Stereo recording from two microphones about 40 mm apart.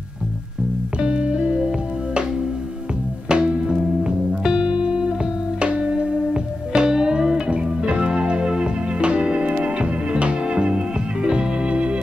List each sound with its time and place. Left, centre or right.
0.9 s music: right
3.3 s music: right
11.2 s organ: right